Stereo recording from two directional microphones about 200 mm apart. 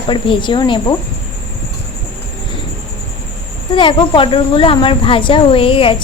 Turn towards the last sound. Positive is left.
turn(degrees=25)  # may be behind; listen again after turning